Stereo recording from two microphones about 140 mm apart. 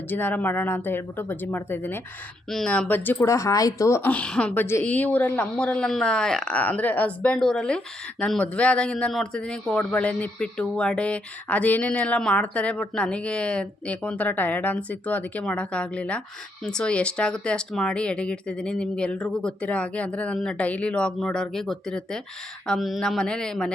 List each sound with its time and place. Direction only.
0.1 s speech: 15° left (ahead or behind)